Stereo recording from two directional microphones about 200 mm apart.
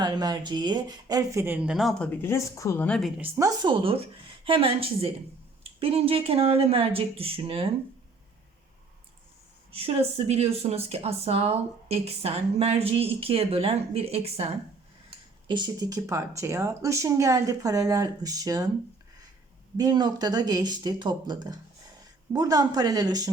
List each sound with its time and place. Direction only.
0.0 s speech: 20° right (ahead or behind); by 3.1 s 5° left (ahead or behind)
3.2 s speech: 15° right (ahead or behind)
9.7 s speech: 30° right (ahead or behind)
19.7 s speech: 20° right (ahead or behind)